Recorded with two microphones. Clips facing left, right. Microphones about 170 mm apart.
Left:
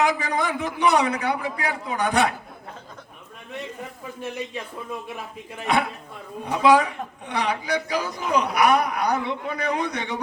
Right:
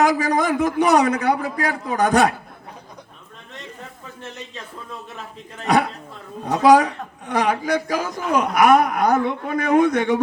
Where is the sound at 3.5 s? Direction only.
10° left (ahead or behind).